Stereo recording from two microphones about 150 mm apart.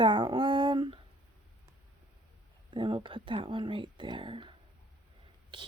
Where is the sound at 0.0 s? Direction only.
30° right (ahead or behind).